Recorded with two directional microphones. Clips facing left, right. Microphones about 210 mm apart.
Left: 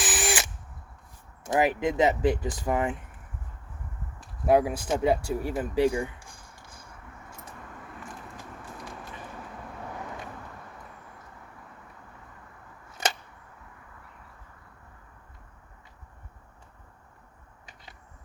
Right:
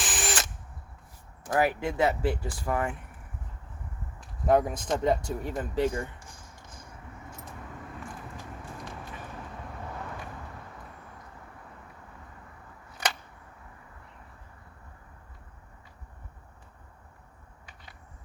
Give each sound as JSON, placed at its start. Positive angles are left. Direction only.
{"t": 0.0, "sound": "drill", "side_deg": 5}
{"t": 1.5, "sound": "speech", "side_deg": 15}
{"t": 4.4, "sound": "speech", "side_deg": 10}
{"t": 13.0, "sound": "a sound", "side_deg": 25}